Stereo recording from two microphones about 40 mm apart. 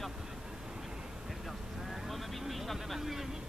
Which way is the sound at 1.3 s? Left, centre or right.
Centre.